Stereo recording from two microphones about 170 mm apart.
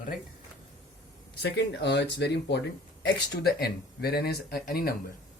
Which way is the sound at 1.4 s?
90° left.